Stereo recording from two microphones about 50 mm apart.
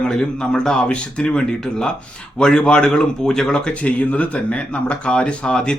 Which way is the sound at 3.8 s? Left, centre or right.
Left.